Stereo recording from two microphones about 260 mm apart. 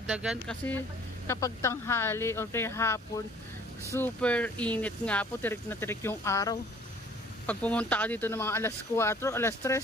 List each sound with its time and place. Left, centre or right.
0.1 s speech: centre
4.0 s speech: centre